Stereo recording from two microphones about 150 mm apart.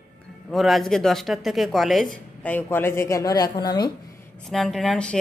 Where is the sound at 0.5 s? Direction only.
Centre (ahead or behind); by 3.9 s 25° left (ahead or behind).